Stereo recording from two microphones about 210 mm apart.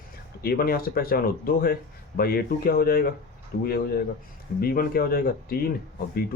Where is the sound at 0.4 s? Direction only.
45° left (ahead or behind).